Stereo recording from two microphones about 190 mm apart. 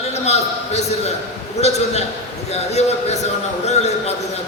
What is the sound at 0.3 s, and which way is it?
A man's voice, 35° left (ahead or behind).